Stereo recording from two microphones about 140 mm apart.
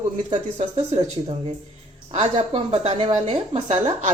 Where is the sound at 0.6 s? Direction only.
50° right (ahead or behind).